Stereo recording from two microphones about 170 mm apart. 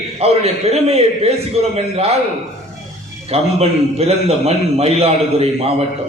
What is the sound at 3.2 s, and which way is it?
A man's voice, 35° right (ahead or behind).